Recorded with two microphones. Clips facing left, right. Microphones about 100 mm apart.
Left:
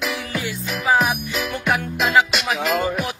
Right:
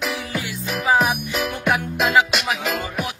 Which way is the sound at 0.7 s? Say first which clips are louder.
Even; 15° right (ahead or behind).